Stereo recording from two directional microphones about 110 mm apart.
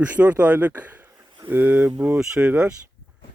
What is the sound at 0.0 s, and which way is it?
Speech, 15° right (ahead or behind).